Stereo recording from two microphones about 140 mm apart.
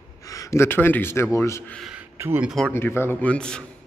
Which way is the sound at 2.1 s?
15° right (ahead or behind).